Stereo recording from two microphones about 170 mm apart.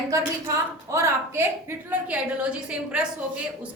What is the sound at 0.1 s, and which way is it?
A woman's voice, 20° right (ahead or behind).